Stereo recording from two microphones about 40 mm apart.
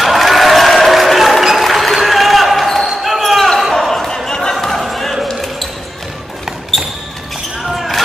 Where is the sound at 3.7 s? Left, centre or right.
Centre.